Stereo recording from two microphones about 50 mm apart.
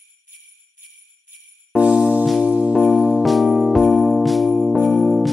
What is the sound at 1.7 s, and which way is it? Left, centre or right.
Jingle bell, right.